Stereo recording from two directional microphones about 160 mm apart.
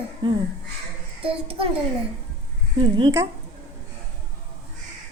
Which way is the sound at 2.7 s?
30° right (ahead or behind).